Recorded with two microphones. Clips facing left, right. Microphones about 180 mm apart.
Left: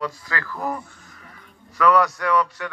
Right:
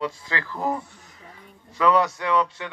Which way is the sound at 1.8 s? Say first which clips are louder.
Left 2 dB; 25° right (ahead or behind).